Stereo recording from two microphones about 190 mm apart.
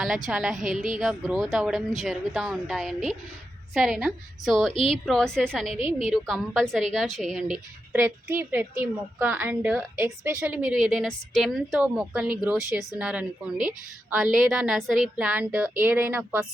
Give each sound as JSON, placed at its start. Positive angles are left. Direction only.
{"t": 0.3, "sound": "a woman's voice", "side_deg": 0}
{"t": 5.7, "sound": "a woman's voice", "side_deg": 30}
{"t": 6.1, "sound": "a woman's voice", "side_deg": 0}